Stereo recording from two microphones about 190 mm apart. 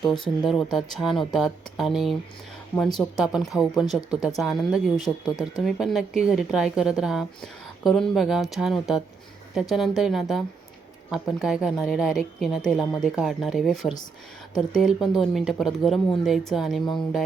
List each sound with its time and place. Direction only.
0.0 s speech: centre (ahead or behind)